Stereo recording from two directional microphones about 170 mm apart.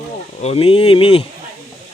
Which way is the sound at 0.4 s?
35° left (ahead or behind).